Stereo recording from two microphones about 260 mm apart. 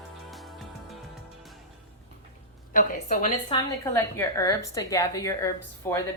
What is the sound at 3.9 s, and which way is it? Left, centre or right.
A woman's voice, centre.